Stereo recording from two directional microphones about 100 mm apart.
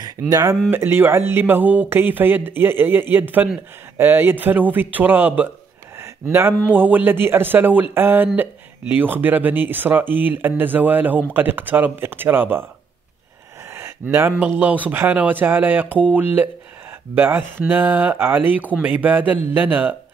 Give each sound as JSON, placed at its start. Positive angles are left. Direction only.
{"t": 0.3, "sound": "speech", "side_deg": -35}
{"t": 0.7, "sound": "speech", "side_deg": -25}
{"t": 13.7, "sound": "a sound", "side_deg": -25}
{"t": 14.4, "sound": "speech", "side_deg": -15}